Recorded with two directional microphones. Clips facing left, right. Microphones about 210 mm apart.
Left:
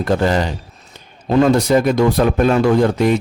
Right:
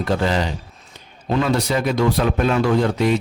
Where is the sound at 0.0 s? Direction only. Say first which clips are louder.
Left 4 dB; 45° left (ahead or behind).